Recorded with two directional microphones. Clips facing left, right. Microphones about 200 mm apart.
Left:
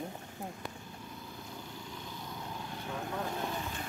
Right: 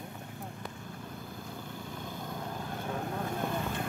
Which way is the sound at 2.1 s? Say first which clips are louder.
Right 4 dB; 50° right (ahead or behind).